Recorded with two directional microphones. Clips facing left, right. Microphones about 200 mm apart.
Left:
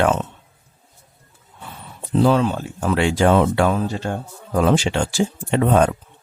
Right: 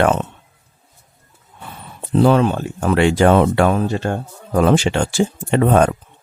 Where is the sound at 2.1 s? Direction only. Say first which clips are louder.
Right 3 dB; 60° right (ahead or behind).